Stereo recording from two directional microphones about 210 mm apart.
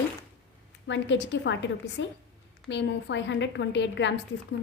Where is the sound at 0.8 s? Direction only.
60° left (ahead or behind).